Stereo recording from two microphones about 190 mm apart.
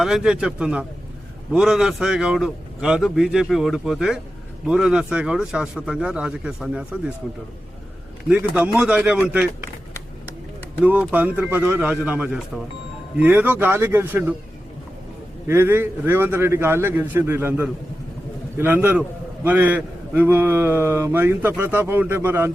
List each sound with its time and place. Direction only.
0.0 s a man's voice: centre (ahead or behind)
8.3 s a man's voice: 10° right (ahead or behind)
10.8 s a man's voice: 10° right (ahead or behind)
15.4 s a man's voice: 10° right (ahead or behind)